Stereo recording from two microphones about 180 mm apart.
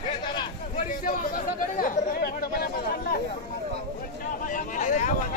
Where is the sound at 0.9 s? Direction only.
50° left (ahead or behind).